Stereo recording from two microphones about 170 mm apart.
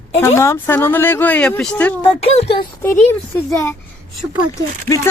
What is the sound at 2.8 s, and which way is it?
Speech, 15° left (ahead or behind).